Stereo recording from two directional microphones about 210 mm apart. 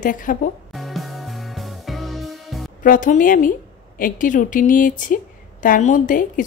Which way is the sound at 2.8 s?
40° left (ahead or behind).